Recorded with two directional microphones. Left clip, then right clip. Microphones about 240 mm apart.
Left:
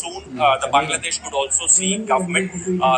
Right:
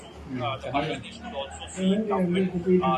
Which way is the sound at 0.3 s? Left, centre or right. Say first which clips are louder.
Left 13 dB; left.